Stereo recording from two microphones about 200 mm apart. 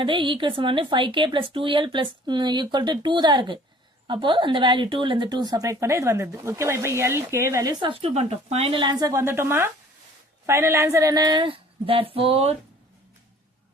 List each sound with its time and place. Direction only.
0.0 s speech: 25° right (ahead or behind)